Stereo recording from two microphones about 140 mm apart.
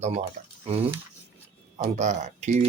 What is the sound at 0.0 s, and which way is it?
Speech, 55° right (ahead or behind).